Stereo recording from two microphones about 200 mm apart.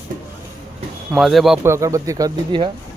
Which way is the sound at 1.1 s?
Centre (ahead or behind).